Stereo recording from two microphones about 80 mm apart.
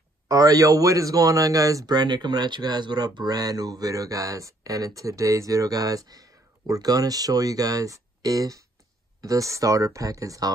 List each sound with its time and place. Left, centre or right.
0.3 s speech: right
2.0 s speech: right